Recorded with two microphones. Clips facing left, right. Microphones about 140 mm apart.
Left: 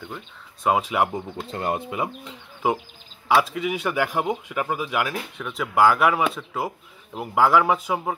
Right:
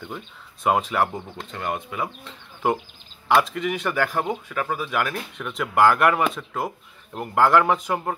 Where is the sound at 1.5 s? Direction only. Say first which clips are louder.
Left 2 dB; 30° left (ahead or behind).